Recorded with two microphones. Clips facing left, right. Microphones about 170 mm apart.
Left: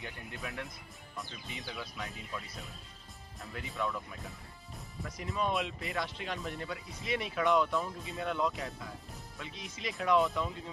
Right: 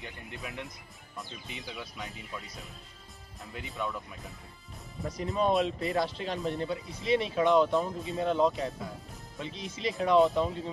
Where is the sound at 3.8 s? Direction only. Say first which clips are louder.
Even; centre (ahead or behind).